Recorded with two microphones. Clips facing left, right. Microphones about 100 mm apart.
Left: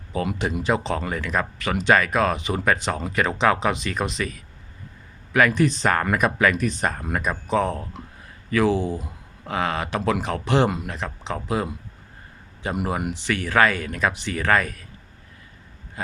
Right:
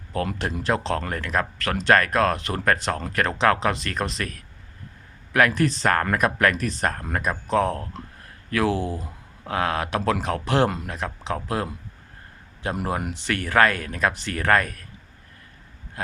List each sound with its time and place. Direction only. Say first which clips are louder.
0.1 s speech: left 2 dB; 5° left (ahead or behind)
12.7 s speech: left 2 dB; 5° left (ahead or behind)